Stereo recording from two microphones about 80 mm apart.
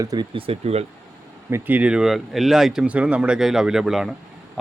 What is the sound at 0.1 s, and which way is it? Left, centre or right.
Speech, right.